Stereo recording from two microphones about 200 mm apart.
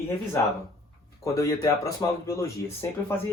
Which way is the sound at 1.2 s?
15° left (ahead or behind).